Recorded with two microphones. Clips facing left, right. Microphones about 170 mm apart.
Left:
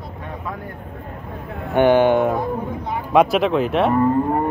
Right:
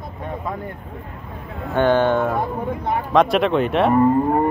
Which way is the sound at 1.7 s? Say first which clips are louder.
Left 3 dB; 15° left (ahead or behind).